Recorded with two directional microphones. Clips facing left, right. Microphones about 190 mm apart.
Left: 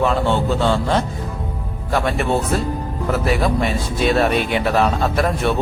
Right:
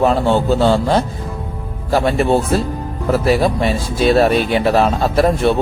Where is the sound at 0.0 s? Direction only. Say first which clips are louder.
Right 4 dB; 40° right (ahead or behind).